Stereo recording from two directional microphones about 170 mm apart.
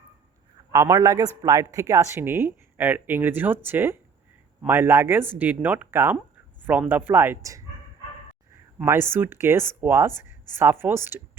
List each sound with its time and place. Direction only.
0.7 s a man's voice: 15° right (ahead or behind)
8.8 s speech: 15° right (ahead or behind)